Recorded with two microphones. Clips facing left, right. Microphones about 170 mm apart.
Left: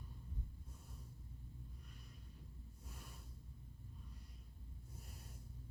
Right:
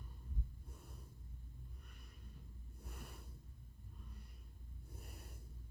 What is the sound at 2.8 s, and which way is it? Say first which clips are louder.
Snort: right 5 dB; 60° right (ahead or behind).